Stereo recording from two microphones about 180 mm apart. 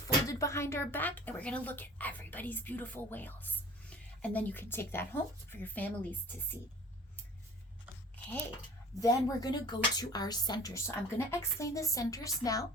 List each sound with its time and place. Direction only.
0.3 s speech: 15° left (ahead or behind)
9.0 s speech: 20° left (ahead or behind)